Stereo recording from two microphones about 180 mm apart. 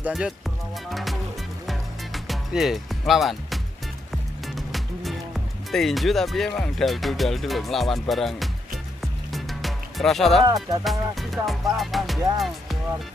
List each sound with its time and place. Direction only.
0.0 s speech: 5° right (ahead or behind)
1.7 s music: centre (ahead or behind)
4.6 s music: centre (ahead or behind)
5.7 s speech: centre (ahead or behind)
9.0 s music: centre (ahead or behind)
10.4 s speech: 20° right (ahead or behind)
10.8 s speech: centre (ahead or behind)